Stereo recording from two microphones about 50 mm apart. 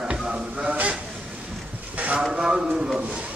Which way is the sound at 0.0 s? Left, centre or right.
Centre.